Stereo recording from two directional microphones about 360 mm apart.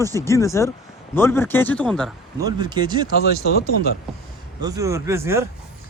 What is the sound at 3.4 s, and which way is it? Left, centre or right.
Speech, left.